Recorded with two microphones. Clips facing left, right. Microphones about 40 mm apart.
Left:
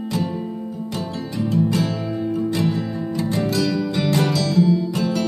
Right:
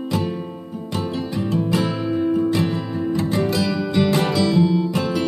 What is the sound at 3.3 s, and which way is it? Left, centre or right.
Music, centre.